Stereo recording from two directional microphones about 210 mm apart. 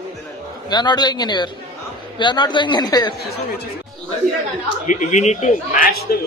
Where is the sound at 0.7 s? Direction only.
20° left (ahead or behind).